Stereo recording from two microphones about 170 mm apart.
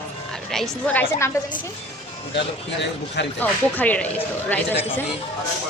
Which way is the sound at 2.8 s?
90° left.